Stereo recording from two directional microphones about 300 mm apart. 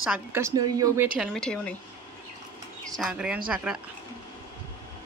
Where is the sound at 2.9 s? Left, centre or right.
Centre.